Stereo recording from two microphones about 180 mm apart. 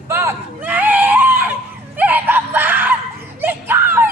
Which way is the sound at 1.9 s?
10° right (ahead or behind).